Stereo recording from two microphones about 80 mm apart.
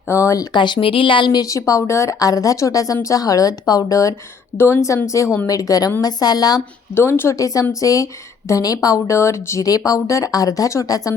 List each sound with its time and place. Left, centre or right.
0.1 s a woman's voice: left
0.5 s speech: left
1.4 s a woman's voice: left
4.5 s a woman's voice: left
6.9 s a woman's voice: left
9.6 s a woman's voice: left